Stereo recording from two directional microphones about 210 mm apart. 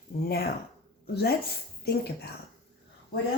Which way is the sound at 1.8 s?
50° left (ahead or behind).